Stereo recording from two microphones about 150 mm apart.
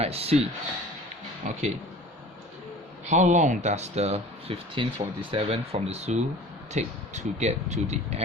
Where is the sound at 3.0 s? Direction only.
50° right (ahead or behind).